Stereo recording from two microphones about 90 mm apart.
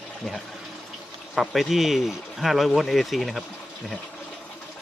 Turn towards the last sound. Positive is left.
turn(degrees=0)  # may be behind; listen again after turning